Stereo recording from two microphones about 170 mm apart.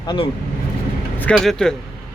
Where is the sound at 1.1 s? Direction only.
5° left (ahead or behind).